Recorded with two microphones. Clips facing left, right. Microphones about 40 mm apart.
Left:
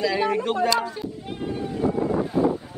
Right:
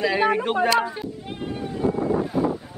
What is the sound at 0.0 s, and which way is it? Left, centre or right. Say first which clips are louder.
Speech: right 2 dB; right.